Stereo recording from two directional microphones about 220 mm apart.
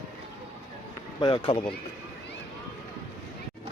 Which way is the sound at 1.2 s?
20° left (ahead or behind).